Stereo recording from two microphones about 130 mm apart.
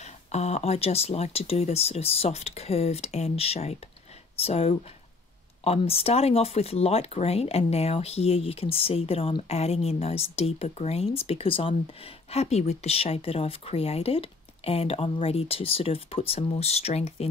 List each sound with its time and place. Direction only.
0.0 s speech: 60° left (ahead or behind)